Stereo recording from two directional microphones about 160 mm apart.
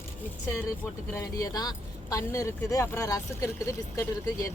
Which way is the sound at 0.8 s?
20° left (ahead or behind).